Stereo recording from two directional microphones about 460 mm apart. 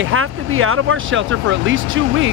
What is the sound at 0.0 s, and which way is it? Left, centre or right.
Speech, right.